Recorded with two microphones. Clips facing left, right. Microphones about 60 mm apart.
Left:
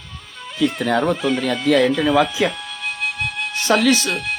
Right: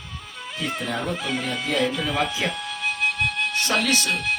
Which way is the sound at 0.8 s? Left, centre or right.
Left.